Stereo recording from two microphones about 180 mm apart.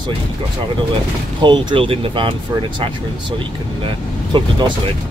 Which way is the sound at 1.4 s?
25° right (ahead or behind).